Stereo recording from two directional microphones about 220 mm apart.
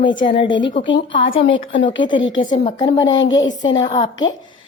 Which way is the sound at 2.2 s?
60° left (ahead or behind).